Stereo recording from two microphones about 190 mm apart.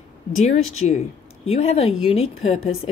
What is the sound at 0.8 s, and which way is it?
A woman's voice, 40° left (ahead or behind).